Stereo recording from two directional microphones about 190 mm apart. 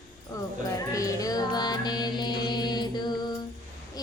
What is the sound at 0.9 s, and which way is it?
Music, 15° left (ahead or behind).